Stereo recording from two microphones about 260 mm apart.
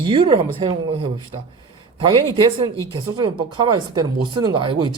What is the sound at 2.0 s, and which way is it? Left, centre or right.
Speech, centre.